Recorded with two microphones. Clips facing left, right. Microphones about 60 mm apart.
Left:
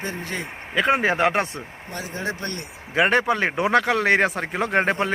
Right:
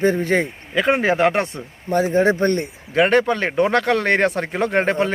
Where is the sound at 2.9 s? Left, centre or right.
Centre.